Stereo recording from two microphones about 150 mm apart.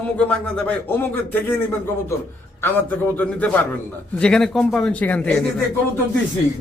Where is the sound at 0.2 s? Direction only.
5° left (ahead or behind).